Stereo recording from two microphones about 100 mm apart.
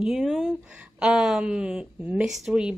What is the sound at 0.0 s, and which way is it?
A woman's voice, 5° right (ahead or behind).